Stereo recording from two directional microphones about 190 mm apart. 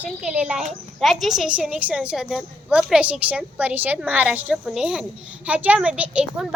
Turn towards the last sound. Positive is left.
turn(degrees=-5)  # may be behind; listen again after turning